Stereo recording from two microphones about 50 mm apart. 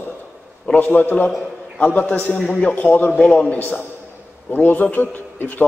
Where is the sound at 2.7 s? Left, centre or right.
Left.